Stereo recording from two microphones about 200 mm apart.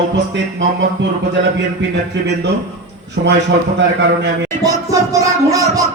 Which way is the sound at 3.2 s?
60° right (ahead or behind).